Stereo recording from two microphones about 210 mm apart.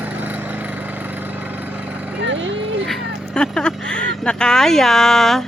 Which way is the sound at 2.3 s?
65° right (ahead or behind).